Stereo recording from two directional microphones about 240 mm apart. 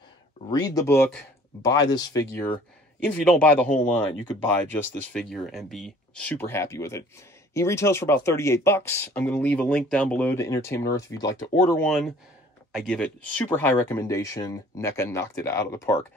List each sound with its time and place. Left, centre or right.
0.5 s speech: centre